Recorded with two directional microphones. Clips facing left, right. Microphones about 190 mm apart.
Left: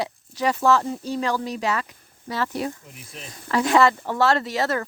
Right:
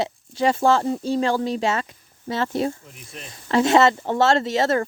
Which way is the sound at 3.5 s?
25° right (ahead or behind).